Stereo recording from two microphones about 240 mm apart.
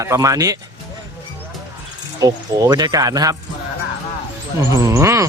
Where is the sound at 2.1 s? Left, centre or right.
Centre.